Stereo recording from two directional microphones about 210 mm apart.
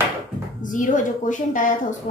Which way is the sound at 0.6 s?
40° left (ahead or behind).